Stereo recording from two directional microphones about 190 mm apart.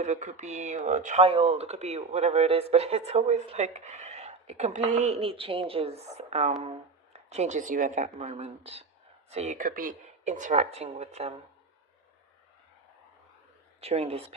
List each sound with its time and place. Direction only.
0.0 s speech: 40° right (ahead or behind)
13.8 s speech: 35° right (ahead or behind)